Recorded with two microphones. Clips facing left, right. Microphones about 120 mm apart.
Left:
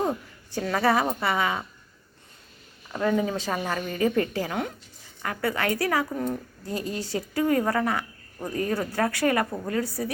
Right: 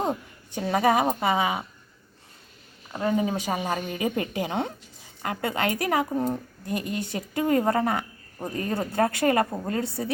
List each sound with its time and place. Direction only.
0.0 s a woman's voice: 25° right (ahead or behind)
3.0 s a woman's voice: 15° right (ahead or behind)